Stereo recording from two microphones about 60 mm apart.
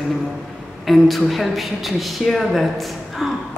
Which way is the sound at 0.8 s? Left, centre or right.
Centre.